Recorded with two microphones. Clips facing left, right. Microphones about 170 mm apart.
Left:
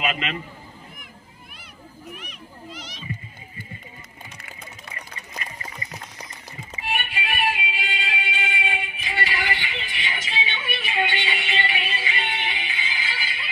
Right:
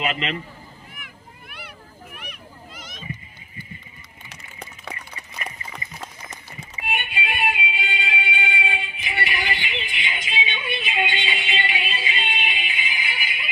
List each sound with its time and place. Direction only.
0.1 s speech: 25° right (ahead or behind)
0.9 s a sound: 70° right (ahead or behind)
2.1 s children playing: 55° right (ahead or behind)
4.3 s music: 80° right
6.9 s music: 20° right (ahead or behind)